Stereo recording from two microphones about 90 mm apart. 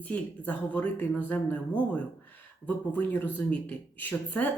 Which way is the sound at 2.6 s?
20° left (ahead or behind).